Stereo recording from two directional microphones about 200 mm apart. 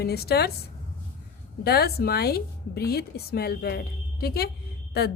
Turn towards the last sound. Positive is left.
turn(degrees=55)  # may be behind; listen again after turning